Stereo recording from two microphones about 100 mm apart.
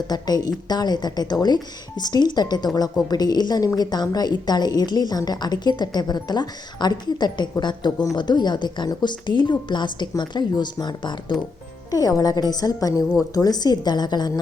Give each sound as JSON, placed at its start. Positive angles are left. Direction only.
{"t": 0.1, "sound": "a woman's voice", "side_deg": 40}
{"t": 11.9, "sound": "a woman's voice", "side_deg": 35}